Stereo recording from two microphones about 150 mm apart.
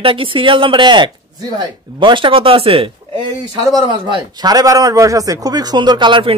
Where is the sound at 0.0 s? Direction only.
35° right (ahead or behind).